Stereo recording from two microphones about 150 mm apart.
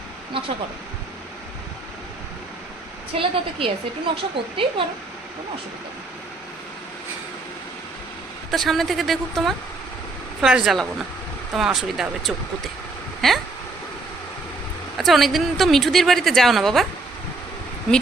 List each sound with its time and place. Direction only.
3.2 s a woman's voice: 35° right (ahead or behind)
8.4 s a woman's voice: centre (ahead or behind)
14.9 s a woman's voice: centre (ahead or behind)